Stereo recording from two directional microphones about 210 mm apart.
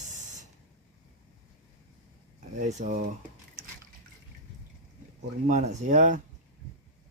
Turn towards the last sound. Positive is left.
turn(degrees=-35)  # may be behind; listen again after turning